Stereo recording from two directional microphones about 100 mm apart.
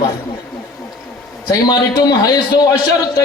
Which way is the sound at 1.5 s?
40° left (ahead or behind).